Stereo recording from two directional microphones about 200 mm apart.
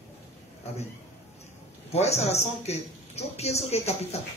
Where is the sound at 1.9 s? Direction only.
30° left (ahead or behind).